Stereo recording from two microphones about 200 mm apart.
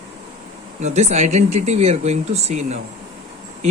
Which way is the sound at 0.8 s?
35° right (ahead or behind).